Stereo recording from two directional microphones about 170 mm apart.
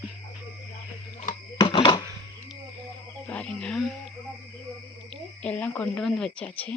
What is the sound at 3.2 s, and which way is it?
Speech, 5° left (ahead or behind).